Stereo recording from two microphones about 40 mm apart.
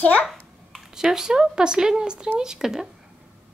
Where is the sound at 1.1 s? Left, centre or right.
Centre.